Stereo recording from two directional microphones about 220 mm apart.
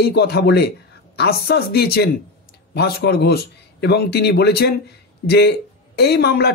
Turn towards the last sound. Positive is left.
turn(degrees=45)  # may be behind; listen again after turning